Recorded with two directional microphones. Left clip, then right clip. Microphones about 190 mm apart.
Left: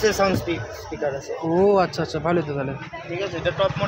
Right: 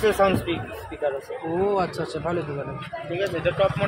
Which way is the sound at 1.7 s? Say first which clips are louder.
Left 5 dB; 50° left (ahead or behind).